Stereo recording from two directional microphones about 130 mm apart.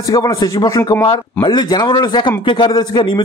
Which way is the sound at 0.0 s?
30° left (ahead or behind).